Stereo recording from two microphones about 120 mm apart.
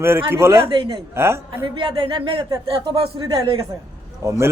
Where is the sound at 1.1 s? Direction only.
20° right (ahead or behind).